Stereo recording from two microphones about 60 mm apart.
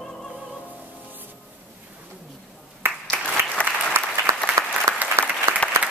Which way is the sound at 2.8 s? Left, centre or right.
Right.